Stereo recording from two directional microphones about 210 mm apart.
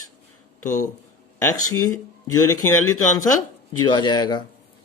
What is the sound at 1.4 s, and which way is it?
Speech, 15° left (ahead or behind).